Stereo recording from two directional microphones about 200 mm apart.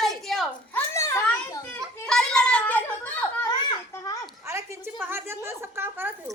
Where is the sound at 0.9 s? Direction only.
15° left (ahead or behind).